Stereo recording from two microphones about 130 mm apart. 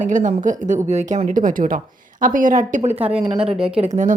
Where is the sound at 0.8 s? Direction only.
65° right (ahead or behind).